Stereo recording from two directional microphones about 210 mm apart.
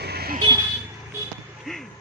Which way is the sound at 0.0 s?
50° right (ahead or behind).